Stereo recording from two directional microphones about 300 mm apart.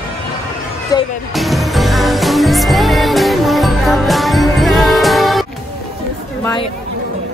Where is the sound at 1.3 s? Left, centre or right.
Centre.